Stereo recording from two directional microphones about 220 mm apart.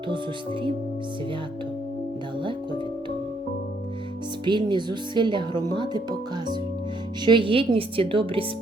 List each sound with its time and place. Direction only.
2.4 s speech: 20° right (ahead or behind)
4.4 s speech: 20° right (ahead or behind)